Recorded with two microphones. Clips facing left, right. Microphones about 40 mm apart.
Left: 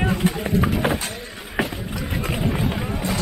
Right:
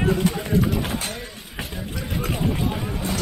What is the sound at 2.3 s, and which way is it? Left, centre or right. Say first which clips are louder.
Vehicle: left 1 dB; centre.